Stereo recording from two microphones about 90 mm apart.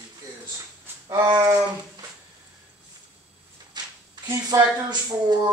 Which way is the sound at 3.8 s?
50° right (ahead or behind).